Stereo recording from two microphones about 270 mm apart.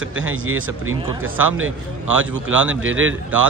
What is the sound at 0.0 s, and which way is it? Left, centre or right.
Speech, right.